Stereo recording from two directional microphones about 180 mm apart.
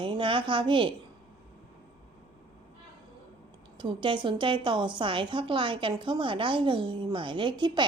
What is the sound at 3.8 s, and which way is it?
A woman's voice, 25° right (ahead or behind).